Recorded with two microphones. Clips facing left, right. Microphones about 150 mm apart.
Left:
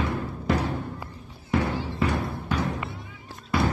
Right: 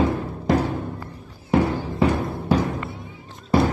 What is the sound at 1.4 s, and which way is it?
Music, 25° right (ahead or behind).